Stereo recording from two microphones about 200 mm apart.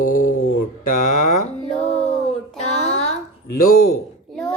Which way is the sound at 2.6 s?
35° left (ahead or behind).